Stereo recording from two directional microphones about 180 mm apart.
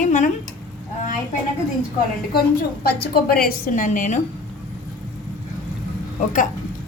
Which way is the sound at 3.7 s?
45° left (ahead or behind).